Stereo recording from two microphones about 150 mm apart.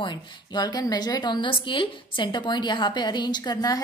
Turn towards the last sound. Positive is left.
turn(degrees=25)  # may be behind; listen again after turning